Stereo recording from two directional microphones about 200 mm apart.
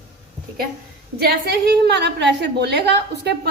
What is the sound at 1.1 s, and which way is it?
A woman's voice, 55° right (ahead or behind).